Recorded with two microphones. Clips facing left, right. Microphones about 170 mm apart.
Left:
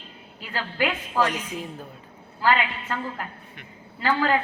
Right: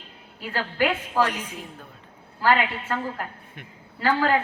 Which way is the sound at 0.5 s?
55° right (ahead or behind).